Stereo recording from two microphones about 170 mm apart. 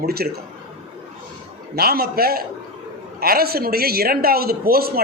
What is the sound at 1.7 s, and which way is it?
Speech, 65° right (ahead or behind).